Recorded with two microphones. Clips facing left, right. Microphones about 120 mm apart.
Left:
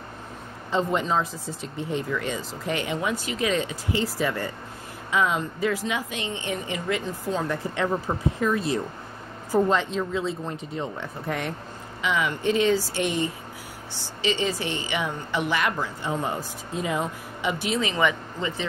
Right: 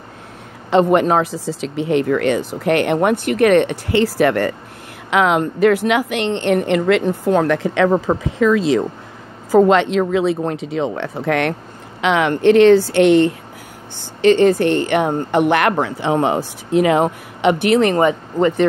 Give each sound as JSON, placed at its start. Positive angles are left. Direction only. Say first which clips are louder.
{"t": 0.7, "sound": "speech", "louder": "right 11 dB", "side_deg": -70}